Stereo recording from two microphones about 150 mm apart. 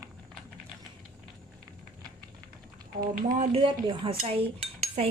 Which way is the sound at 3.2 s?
65° right (ahead or behind).